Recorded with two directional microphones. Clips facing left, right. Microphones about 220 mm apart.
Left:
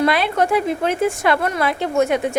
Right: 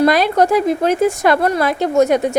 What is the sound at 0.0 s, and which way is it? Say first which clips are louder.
Speech: right 5 dB; 40° right (ahead or behind).